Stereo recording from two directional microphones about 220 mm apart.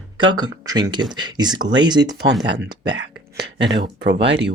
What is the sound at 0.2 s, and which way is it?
Speech, 20° right (ahead or behind).